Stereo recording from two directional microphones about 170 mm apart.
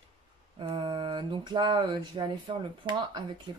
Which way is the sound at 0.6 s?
30° right (ahead or behind).